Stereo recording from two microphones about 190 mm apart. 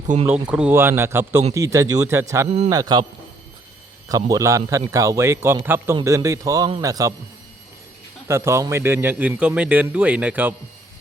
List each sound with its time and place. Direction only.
0.1 s speech: 40° right (ahead or behind)
0.4 s a man's voice: 5° right (ahead or behind); by 3.1 s 20° right (ahead or behind)
4.1 s a man's voice: 15° right (ahead or behind)
8.3 s a man's voice: 15° right (ahead or behind)